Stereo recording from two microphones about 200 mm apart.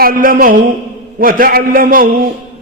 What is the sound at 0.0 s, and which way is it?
A man's voice, 45° right (ahead or behind).